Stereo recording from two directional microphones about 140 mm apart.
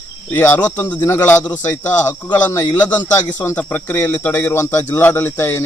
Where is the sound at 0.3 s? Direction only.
15° left (ahead or behind).